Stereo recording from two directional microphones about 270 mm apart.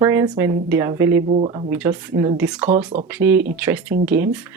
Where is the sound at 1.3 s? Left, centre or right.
Right.